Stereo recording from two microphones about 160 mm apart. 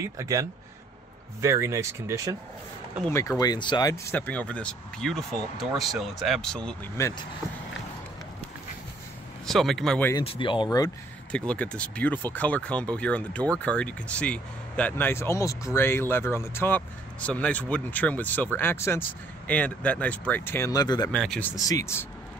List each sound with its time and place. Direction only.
0.0 s speech: 20° right (ahead or behind)
3.1 s speech: 20° left (ahead or behind)
7.0 s speech: 20° left (ahead or behind)
9.5 s speech: centre (ahead or behind)
10.2 s speech: 35° left (ahead or behind)
11.3 s speech: 10° left (ahead or behind); by 21.1 s 25° left (ahead or behind)
21.1 s speech: 5° left (ahead or behind)
21.5 s speech: 20° left (ahead or behind)